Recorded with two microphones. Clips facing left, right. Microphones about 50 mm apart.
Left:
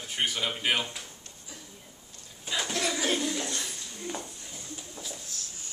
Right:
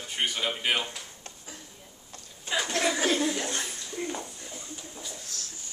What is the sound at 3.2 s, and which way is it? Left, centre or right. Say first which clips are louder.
Speech: right 3 dB; right.